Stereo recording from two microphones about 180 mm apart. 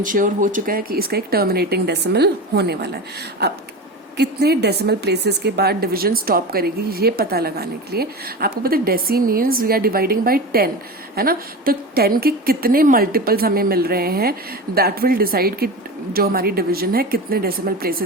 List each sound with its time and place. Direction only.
0.0 s speech: 50° right (ahead or behind)